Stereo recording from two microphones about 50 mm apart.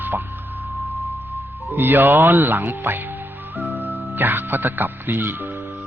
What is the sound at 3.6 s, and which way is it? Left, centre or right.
Music, right.